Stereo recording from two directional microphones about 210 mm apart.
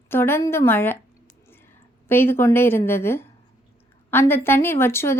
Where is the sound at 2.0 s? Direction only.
10° left (ahead or behind).